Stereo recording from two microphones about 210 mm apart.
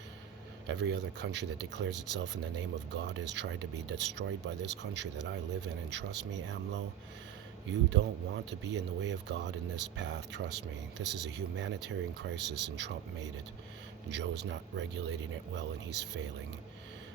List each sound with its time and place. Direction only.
0.7 s speech: 55° right (ahead or behind)